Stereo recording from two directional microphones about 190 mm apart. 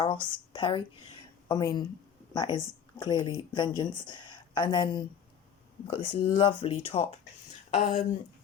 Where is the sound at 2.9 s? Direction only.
25° left (ahead or behind).